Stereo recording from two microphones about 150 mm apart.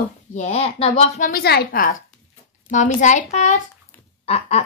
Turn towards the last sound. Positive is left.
turn(degrees=45)  # may be behind; listen again after turning